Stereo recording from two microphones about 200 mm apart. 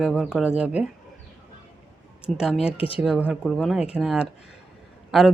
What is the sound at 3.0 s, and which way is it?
Speech, 5° right (ahead or behind).